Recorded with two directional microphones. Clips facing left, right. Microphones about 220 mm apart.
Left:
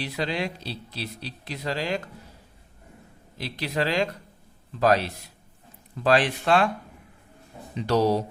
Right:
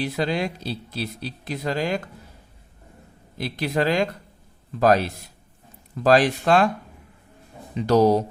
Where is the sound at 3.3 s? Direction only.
50° right (ahead or behind).